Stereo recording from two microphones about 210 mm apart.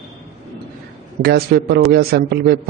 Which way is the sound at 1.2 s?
50° right (ahead or behind).